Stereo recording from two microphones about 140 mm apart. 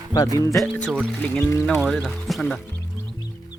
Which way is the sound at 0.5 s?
Centre (ahead or behind).